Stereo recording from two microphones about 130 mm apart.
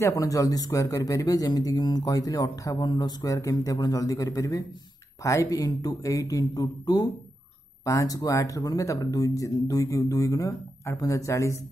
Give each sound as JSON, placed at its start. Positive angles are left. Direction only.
{"t": 0.0, "sound": "a man's voice", "side_deg": 25}